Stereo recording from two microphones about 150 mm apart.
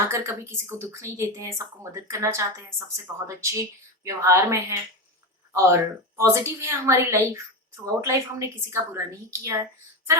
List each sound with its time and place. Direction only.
0.1 s speech: 20° right (ahead or behind)